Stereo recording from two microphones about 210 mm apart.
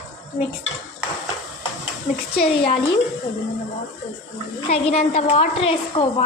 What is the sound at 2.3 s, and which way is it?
Speech, 30° left (ahead or behind).